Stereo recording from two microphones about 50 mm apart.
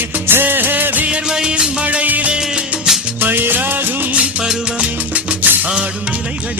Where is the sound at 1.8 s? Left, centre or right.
Right.